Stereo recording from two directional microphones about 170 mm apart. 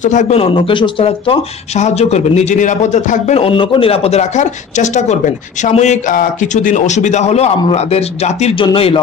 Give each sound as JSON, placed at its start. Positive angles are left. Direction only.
{"t": 0.0, "sound": "speech", "side_deg": 45}